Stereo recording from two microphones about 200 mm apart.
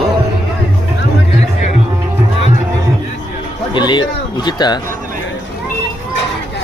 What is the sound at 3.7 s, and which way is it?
Music, 20° left (ahead or behind).